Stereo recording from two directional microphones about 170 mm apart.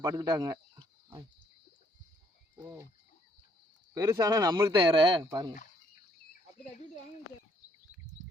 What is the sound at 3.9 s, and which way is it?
Speech, 15° right (ahead or behind).